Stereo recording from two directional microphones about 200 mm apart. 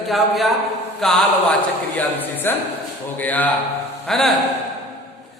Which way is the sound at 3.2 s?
10° left (ahead or behind).